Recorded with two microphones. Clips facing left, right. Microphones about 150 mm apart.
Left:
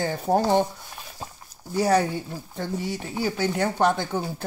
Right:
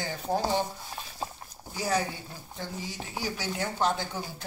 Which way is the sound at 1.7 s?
65° left (ahead or behind).